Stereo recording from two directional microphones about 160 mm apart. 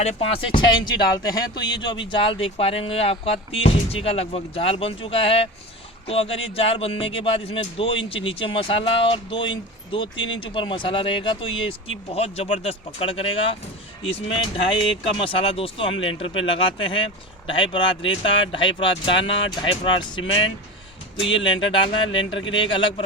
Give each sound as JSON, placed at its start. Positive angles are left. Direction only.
{"t": 0.0, "sound": "speech", "side_deg": 40}
{"t": 21.4, "sound": "speech", "side_deg": 30}